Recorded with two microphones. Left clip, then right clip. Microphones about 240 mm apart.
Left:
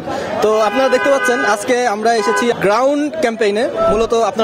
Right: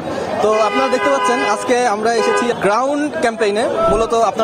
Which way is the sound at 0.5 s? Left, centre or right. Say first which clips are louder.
Left 2 dB; left.